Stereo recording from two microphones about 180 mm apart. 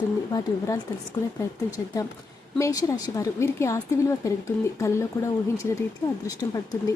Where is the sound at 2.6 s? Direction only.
20° left (ahead or behind).